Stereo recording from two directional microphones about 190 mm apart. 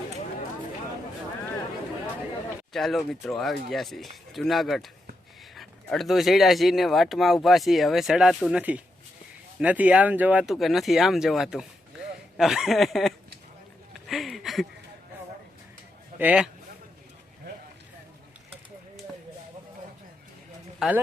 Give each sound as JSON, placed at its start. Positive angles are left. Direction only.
{"t": 2.7, "sound": "speech", "side_deg": 0}
{"t": 14.1, "sound": "a sound", "side_deg": 0}
{"t": 16.1, "sound": "speech", "side_deg": -5}
{"t": 20.7, "sound": "a man's voice", "side_deg": 0}